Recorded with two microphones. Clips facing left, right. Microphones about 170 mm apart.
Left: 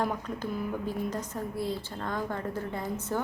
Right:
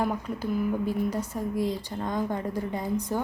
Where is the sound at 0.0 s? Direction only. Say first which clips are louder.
Right 3 dB; 10° right (ahead or behind).